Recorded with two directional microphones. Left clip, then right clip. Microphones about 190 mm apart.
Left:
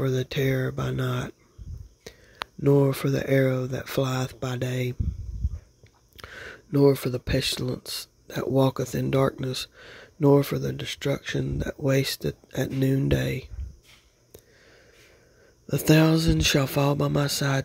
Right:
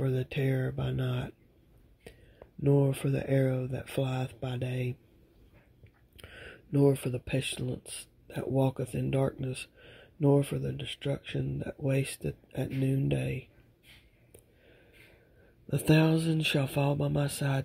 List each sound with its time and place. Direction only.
0.0 s speech: 25° left (ahead or behind)
2.6 s speech: 25° left (ahead or behind)
6.1 s speech: 25° left (ahead or behind)
15.6 s speech: 25° left (ahead or behind)